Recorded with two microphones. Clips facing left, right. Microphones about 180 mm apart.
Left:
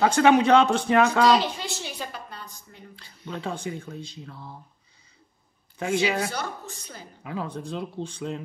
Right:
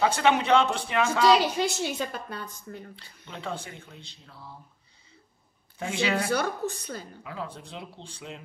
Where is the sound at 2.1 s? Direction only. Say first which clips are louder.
Right 3 dB; 50° right (ahead or behind).